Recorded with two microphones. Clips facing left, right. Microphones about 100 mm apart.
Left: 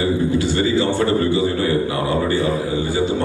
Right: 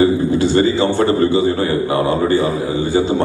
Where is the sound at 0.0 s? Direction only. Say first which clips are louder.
Right 5 dB; 30° right (ahead or behind).